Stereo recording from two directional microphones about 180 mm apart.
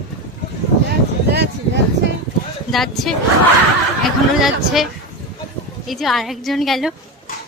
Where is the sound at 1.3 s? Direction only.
65° right (ahead or behind).